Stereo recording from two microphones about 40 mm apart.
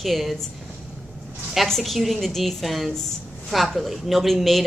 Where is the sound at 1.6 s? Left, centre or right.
Centre.